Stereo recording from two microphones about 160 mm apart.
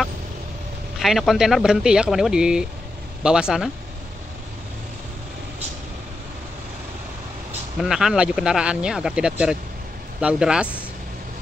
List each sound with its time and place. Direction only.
0.9 s speech: centre (ahead or behind)
7.8 s speech: 5° right (ahead or behind)